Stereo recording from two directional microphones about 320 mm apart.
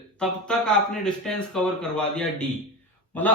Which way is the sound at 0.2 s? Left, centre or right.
Centre.